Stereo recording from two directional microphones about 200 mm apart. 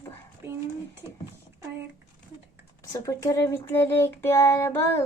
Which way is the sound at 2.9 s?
15° left (ahead or behind).